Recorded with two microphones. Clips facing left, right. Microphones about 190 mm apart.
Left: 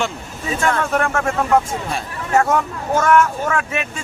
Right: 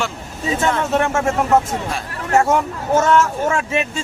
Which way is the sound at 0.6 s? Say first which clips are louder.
Even; 20° right (ahead or behind).